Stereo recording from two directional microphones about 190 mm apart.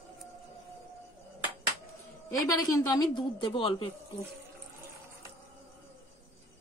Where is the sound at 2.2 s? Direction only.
20° left (ahead or behind).